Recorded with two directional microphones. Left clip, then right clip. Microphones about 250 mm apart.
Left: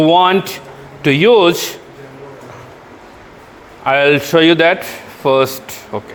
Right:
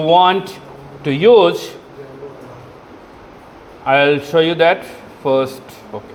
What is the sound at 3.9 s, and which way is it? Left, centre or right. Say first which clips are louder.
A man's voice: left 2 dB; left.